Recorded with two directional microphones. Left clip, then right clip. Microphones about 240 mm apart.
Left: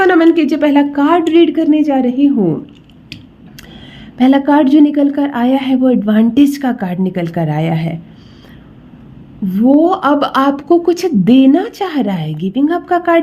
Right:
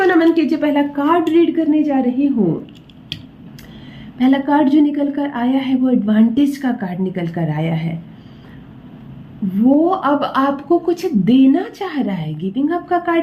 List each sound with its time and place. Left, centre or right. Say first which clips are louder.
0.0 s a woman's voice: left 4 dB; left
4.2 s a woman's voice: left 4 dB; left
9.6 s a woman's voice: left 4 dB; left